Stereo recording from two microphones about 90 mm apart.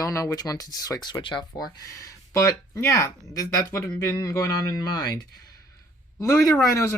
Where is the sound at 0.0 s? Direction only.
35° left (ahead or behind).